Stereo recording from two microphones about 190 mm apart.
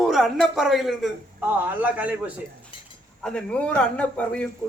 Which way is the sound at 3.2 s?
5° left (ahead or behind).